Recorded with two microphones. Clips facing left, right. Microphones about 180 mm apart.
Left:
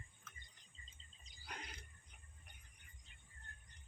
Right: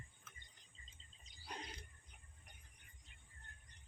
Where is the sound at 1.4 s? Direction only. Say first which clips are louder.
Right 2 dB; 30° right (ahead or behind).